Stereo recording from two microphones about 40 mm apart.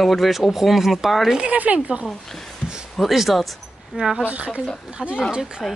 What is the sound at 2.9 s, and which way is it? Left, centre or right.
Speech, centre.